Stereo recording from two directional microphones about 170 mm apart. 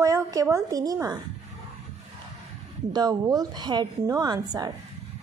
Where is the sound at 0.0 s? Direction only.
20° right (ahead or behind).